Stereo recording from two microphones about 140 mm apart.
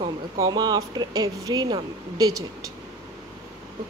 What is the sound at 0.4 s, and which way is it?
Speech, 30° right (ahead or behind).